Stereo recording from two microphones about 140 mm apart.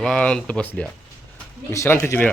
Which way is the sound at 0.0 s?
5° left (ahead or behind).